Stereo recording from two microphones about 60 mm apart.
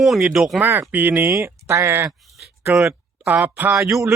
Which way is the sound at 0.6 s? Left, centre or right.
Right.